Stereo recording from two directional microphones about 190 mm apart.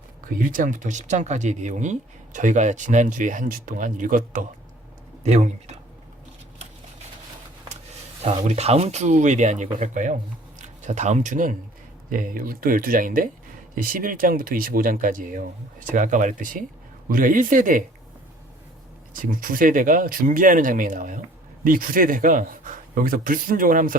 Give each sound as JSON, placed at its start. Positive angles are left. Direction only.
{"t": 0.3, "sound": "speech", "side_deg": -45}
{"t": 8.2, "sound": "a man's voice", "side_deg": -35}
{"t": 19.1, "sound": "a man's voice", "side_deg": -45}